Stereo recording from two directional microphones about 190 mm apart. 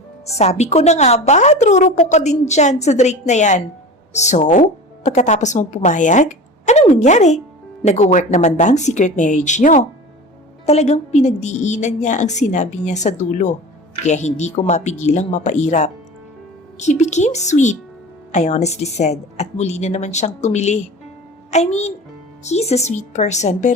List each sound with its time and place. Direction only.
0.3 s a woman's voice: 35° left (ahead or behind)